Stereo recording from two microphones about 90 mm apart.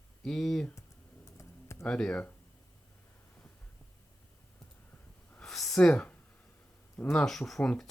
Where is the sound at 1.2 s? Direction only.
35° left (ahead or behind).